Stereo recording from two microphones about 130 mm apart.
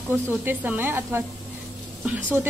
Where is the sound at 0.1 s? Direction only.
15° right (ahead or behind).